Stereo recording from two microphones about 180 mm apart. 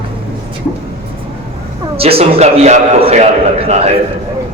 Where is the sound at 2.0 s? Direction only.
35° right (ahead or behind).